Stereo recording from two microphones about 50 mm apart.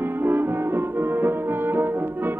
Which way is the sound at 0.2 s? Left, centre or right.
Right.